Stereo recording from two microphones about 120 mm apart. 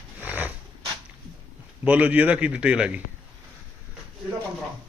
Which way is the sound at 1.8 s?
15° right (ahead or behind).